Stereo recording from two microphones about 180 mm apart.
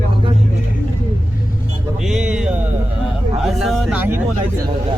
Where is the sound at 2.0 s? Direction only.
5° right (ahead or behind).